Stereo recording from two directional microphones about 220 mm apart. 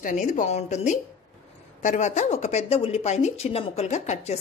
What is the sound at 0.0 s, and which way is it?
A woman's voice, 35° left (ahead or behind).